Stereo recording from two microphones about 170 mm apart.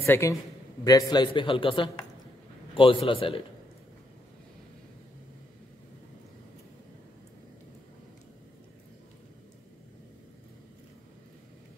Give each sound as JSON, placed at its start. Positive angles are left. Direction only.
{"t": 0.0, "sound": "a man's voice", "side_deg": 15}